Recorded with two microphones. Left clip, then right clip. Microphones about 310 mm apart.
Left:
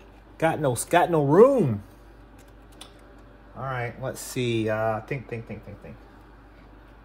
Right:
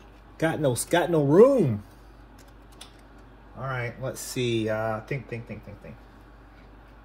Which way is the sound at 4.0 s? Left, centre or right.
Left.